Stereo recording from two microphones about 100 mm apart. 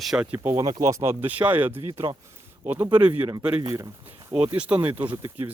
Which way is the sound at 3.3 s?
40° right (ahead or behind).